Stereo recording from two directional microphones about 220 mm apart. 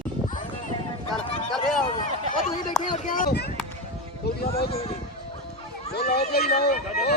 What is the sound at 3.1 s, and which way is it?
Speech, 40° left (ahead or behind).